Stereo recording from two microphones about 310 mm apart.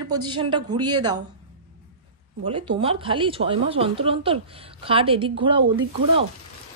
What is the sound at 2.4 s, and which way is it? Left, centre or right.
A woman's voice, centre.